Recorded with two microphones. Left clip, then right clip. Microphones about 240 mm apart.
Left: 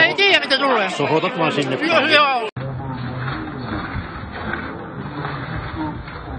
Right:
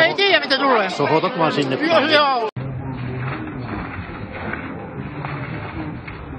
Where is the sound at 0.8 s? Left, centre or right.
Centre.